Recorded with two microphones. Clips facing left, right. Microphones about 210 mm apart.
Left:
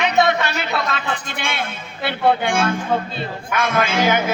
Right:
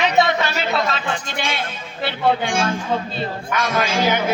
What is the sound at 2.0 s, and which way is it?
A man's voice, 60° left (ahead or behind).